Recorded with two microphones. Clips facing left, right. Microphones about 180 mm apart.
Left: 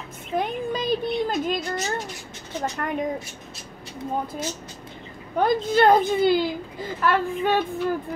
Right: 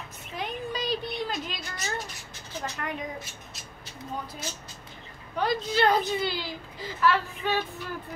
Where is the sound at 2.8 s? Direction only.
50° left (ahead or behind).